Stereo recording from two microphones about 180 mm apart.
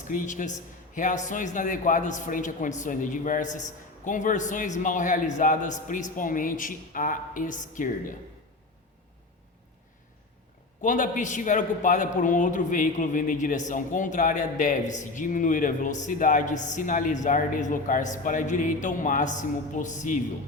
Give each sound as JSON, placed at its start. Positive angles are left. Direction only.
{"t": 0.1, "sound": "a man's voice", "side_deg": 45}
{"t": 10.8, "sound": "a man's voice", "side_deg": 45}